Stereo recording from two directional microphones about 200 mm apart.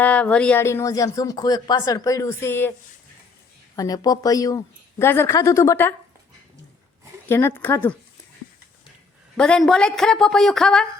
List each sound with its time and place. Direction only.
0.0 s speech: 5° left (ahead or behind)
3.8 s speech: 20° left (ahead or behind)
7.3 s speech: 10° left (ahead or behind)
9.4 s a woman's voice: 5° left (ahead or behind)